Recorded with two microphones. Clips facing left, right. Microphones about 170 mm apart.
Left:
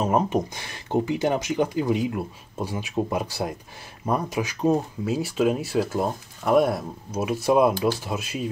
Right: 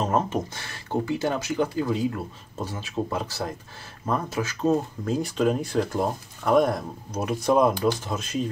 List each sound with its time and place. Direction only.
0.0 s speech: 15° left (ahead or behind)